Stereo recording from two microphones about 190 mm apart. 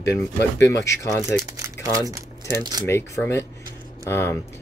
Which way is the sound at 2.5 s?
20° right (ahead or behind).